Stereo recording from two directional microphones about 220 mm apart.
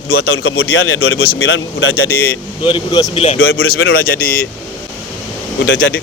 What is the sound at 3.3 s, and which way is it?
Speech, 65° left (ahead or behind).